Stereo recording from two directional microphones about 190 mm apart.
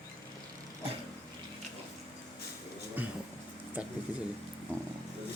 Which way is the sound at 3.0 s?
10° right (ahead or behind).